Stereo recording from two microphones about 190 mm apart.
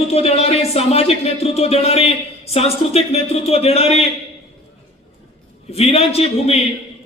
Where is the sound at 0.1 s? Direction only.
30° left (ahead or behind).